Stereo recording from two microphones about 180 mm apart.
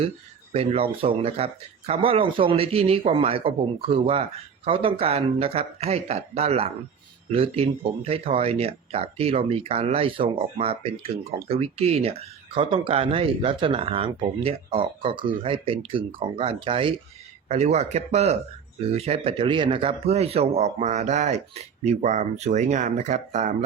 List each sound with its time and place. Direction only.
0.5 s speech: 30° right (ahead or behind)